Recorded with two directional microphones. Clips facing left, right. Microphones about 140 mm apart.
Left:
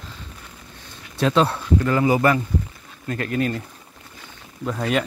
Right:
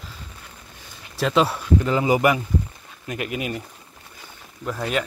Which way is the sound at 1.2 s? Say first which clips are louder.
Left 1 dB; 5° right (ahead or behind).